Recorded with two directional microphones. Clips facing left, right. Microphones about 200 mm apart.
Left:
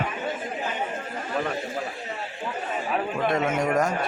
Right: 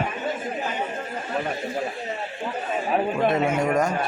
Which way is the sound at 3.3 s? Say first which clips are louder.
Right 2 dB; 5° right (ahead or behind).